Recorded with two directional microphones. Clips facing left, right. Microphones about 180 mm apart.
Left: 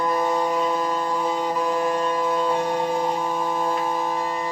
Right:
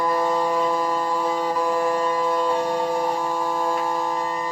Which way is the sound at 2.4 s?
10° right (ahead or behind).